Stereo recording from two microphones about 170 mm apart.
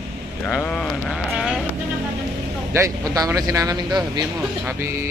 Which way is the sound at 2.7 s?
20° right (ahead or behind).